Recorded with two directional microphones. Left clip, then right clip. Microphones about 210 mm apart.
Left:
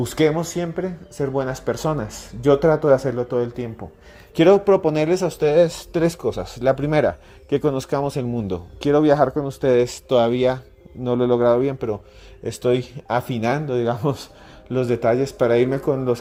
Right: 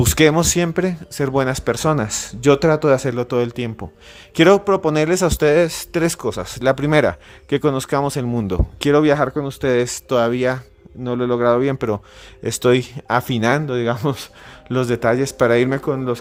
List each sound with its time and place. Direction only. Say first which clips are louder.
0.0 s speech: right 5 dB; 25° right (ahead or behind)